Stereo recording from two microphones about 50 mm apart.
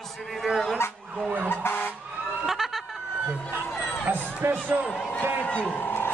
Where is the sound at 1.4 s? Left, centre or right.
Left.